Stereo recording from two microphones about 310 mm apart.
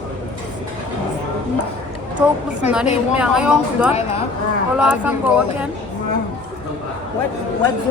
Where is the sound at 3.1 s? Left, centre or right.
Centre.